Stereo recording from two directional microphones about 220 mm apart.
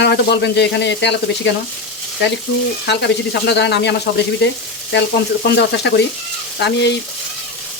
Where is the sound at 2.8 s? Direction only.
50° left (ahead or behind).